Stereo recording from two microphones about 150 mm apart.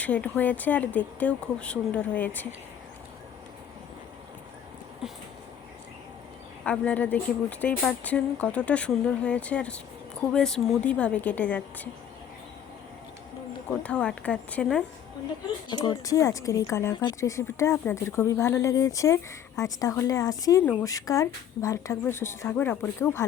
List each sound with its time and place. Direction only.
0.0 s speech: 10° left (ahead or behind)
6.7 s speech: 10° left (ahead or behind)
13.8 s speech: 5° left (ahead or behind)
15.7 s speech: 25° left (ahead or behind)